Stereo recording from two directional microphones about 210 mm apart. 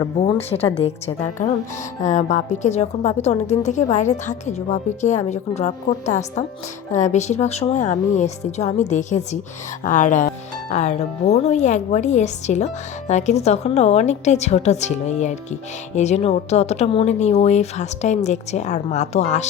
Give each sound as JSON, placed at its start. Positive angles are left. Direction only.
{"t": 0.0, "sound": "a woman's voice", "side_deg": 25}